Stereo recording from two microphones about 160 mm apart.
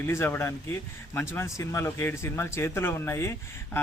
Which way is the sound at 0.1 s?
15° left (ahead or behind).